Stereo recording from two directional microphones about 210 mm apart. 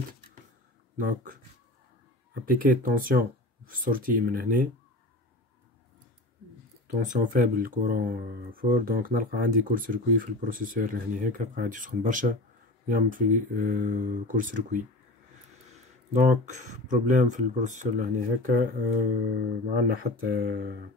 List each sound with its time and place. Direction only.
0.9 s speech: 40° right (ahead or behind)
2.4 s speech: 45° right (ahead or behind)
7.0 s speech: 40° right (ahead or behind)
19.9 s speech: 45° right (ahead or behind)